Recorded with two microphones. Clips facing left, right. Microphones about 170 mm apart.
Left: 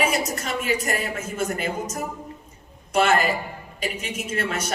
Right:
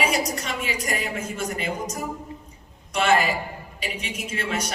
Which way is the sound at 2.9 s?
45° left (ahead or behind).